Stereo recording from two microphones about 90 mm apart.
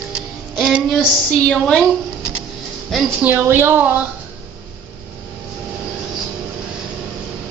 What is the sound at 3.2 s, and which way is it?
Speech, 20° right (ahead or behind).